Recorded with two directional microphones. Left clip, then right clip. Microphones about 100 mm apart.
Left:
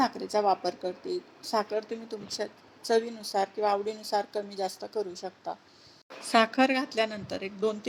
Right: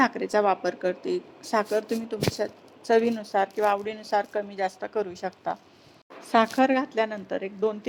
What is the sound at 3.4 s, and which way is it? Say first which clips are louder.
Speech: right 2 dB; 25° left (ahead or behind).